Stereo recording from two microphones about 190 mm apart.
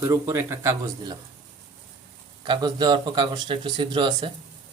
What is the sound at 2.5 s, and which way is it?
Speech, 20° right (ahead or behind).